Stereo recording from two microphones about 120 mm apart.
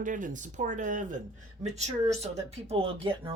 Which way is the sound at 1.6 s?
70° right (ahead or behind).